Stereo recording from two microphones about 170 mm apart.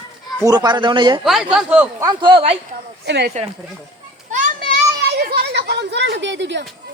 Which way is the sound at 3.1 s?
75° right (ahead or behind).